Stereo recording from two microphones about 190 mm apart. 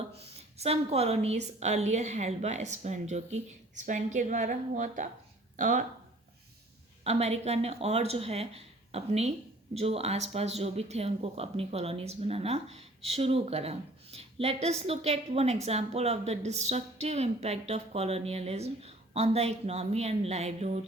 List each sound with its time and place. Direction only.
0.3 s speech: 35° right (ahead or behind)
7.0 s speech: 35° right (ahead or behind)